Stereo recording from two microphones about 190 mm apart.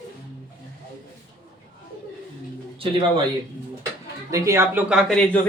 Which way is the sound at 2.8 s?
25° right (ahead or behind).